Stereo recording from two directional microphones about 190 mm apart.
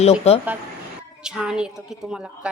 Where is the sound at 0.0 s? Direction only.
30° left (ahead or behind).